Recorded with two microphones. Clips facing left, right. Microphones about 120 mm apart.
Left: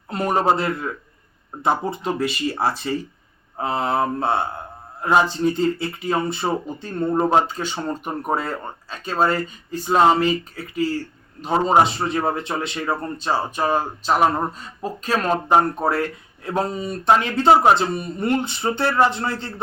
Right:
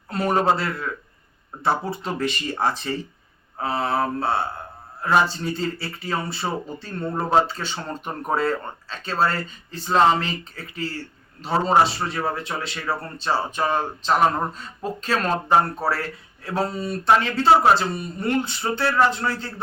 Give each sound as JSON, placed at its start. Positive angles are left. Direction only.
{"t": 0.1, "sound": "speech", "side_deg": 20}